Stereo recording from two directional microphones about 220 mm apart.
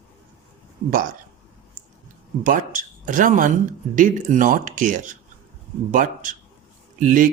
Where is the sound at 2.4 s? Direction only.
35° right (ahead or behind).